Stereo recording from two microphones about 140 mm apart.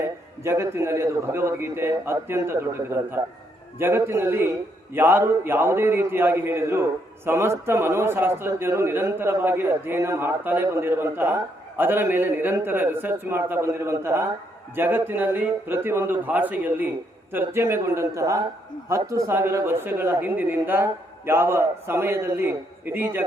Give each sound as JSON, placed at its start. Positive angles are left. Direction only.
{"t": 0.4, "sound": "a man's voice", "side_deg": -20}